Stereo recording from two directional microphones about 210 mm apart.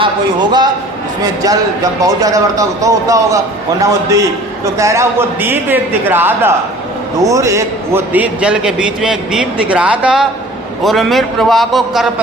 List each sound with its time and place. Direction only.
0.0 s a man's voice: 20° right (ahead or behind); by 12.0 s centre (ahead or behind)